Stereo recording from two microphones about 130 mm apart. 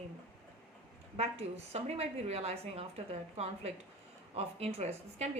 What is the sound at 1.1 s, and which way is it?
A woman's voice, 55° right (ahead or behind).